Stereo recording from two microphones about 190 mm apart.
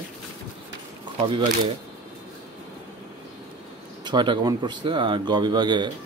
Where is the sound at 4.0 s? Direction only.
25° right (ahead or behind).